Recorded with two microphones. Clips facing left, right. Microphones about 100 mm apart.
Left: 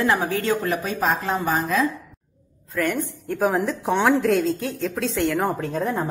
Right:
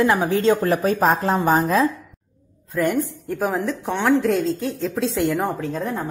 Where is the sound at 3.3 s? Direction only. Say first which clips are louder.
Left 5 dB; centre (ahead or behind).